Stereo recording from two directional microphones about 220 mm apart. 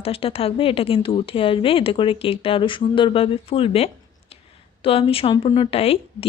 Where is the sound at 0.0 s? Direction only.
25° left (ahead or behind).